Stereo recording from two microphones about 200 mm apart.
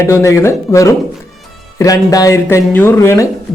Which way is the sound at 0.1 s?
15° left (ahead or behind).